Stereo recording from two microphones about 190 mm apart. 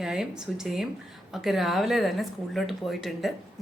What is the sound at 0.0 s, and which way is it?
Speech, 5° right (ahead or behind).